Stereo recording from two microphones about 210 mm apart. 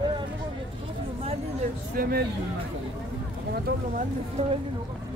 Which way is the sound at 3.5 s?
45° right (ahead or behind).